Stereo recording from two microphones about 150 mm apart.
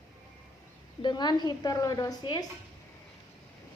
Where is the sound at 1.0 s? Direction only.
30° left (ahead or behind).